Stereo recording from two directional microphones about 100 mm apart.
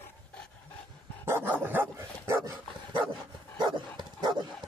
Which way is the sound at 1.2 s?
25° right (ahead or behind).